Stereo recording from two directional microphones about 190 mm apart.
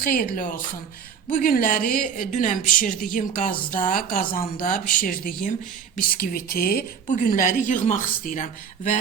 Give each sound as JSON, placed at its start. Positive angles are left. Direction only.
{"t": 0.0, "sound": "a woman's voice", "side_deg": 50}